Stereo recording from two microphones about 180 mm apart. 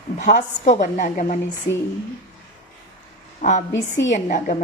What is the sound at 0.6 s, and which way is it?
Speech, 40° left (ahead or behind).